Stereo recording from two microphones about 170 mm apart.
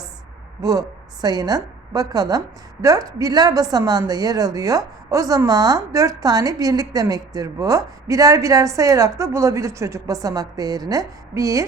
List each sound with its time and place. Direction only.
0.6 s a woman's voice: 20° right (ahead or behind)